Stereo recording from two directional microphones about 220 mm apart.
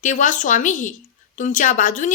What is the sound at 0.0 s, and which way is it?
A woman's voice, 35° left (ahead or behind).